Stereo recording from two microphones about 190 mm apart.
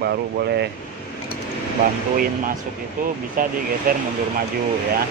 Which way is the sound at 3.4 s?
45° right (ahead or behind).